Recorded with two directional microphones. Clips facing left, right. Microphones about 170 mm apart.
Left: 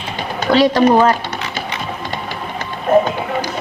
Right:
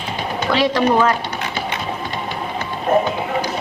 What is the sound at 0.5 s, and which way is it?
Speech, 35° left (ahead or behind).